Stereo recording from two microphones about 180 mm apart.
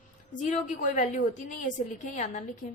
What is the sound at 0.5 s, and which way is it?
A woman's voice, 45° left (ahead or behind).